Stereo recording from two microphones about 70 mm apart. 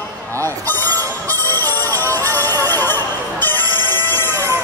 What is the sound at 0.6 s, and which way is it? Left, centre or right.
Music, left.